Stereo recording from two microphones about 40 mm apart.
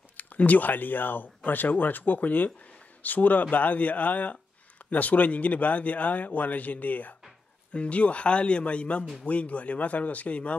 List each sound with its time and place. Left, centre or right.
0.2 s speech: left
7.7 s speech: left